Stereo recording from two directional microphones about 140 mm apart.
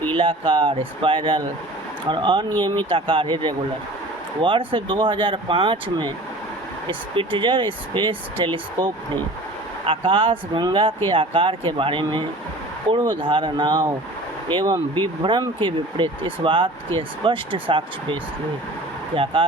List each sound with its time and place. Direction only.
0.1 s speech: 40° right (ahead or behind)